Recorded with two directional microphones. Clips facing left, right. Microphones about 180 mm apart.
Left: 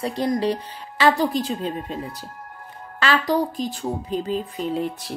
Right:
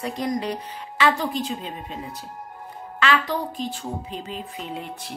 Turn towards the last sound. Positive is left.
turn(degrees=35)  # may be behind; listen again after turning